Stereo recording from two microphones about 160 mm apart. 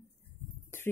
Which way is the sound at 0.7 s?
15° left (ahead or behind).